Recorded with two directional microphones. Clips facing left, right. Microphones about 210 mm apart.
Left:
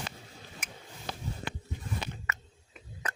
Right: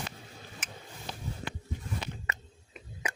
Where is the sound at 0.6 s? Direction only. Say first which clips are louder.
Right 1 dB; 10° left (ahead or behind).